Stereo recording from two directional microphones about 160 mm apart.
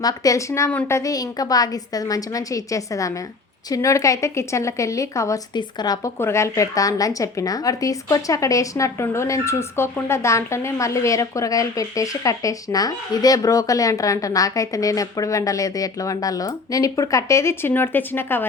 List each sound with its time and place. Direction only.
0.0 s a woman's voice: 25° left (ahead or behind)